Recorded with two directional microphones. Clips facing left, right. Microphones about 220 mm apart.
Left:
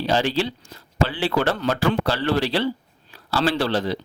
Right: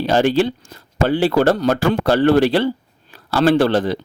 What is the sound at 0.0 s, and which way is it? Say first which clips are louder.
A man's voice: right 6 dB; 50° right (ahead or behind).